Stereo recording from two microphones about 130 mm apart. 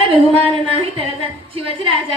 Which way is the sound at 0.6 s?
45° right (ahead or behind).